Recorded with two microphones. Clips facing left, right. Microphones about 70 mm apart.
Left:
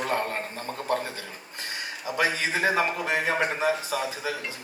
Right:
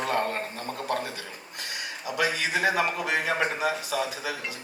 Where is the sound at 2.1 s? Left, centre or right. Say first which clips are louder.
Left 1 dB; left.